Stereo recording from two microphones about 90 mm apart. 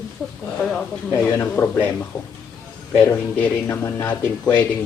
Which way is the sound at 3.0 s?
20° left (ahead or behind).